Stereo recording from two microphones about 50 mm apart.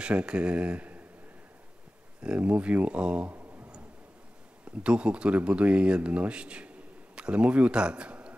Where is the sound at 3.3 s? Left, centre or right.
Right.